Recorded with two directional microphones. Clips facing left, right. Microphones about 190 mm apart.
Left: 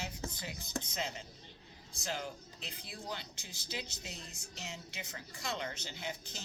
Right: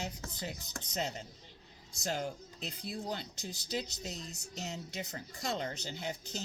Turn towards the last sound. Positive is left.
turn(degrees=-40)  # may be behind; listen again after turning